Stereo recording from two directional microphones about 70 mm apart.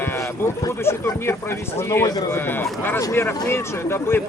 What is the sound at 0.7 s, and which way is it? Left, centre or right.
Speech, left.